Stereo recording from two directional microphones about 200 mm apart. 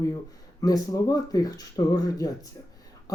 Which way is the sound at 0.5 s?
20° left (ahead or behind).